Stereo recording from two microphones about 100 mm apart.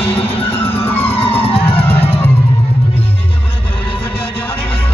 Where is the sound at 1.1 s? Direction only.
70° left (ahead or behind).